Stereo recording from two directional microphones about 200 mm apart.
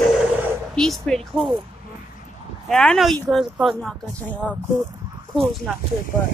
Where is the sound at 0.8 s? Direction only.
Centre (ahead or behind).